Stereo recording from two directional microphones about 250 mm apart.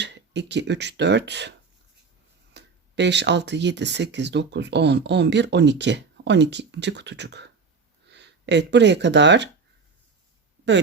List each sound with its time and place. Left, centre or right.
0.0 s speech: right